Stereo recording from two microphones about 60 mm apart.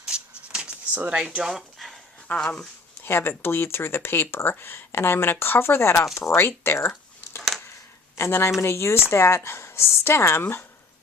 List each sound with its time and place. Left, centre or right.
0.0 s a sound: centre
1.0 s speech: right
1.4 s a sound: centre
2.2 s speech: left
3.0 s speech: left
8.1 s speech: left